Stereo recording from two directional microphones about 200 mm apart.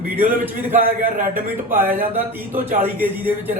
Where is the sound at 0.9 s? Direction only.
45° right (ahead or behind).